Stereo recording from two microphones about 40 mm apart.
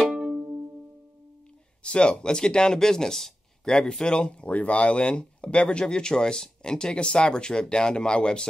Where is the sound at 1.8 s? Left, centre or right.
Left.